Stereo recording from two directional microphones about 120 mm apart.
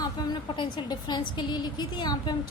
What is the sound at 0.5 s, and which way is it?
A woman's voice, 40° left (ahead or behind).